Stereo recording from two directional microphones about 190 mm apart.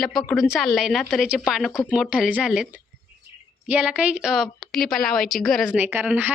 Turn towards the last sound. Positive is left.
turn(degrees=-10)  # may be behind; listen again after turning